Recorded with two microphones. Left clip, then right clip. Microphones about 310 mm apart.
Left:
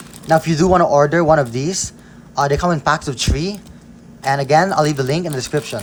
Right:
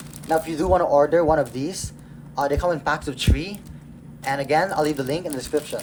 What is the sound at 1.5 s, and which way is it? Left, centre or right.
Speech, left.